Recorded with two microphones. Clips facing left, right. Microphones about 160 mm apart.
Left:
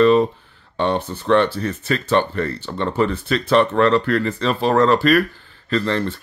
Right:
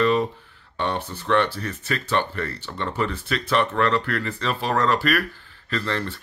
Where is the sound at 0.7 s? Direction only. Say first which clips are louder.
Left 6 dB; 30° left (ahead or behind).